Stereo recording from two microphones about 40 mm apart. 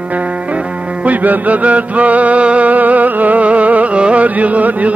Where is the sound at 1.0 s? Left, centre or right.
Right.